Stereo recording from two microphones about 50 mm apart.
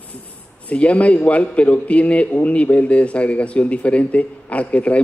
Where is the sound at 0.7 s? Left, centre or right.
Left.